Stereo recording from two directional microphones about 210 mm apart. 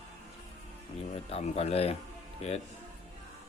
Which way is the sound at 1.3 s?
30° left (ahead or behind).